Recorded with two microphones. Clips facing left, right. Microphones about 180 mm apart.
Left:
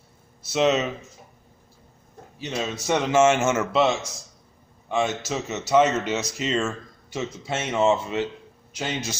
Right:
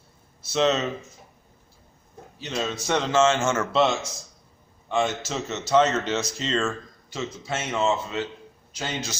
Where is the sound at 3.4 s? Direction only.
20° left (ahead or behind).